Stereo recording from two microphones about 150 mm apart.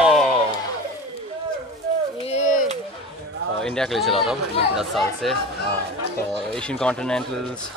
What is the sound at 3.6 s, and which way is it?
Speech, 5° left (ahead or behind).